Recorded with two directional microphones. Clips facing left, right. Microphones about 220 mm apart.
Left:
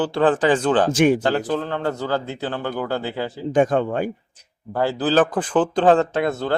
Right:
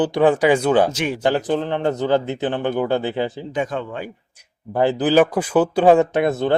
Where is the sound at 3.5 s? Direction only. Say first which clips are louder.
Left 6 dB; 50° left (ahead or behind).